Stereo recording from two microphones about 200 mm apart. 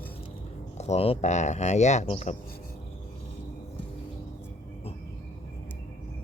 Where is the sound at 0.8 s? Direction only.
30° left (ahead or behind).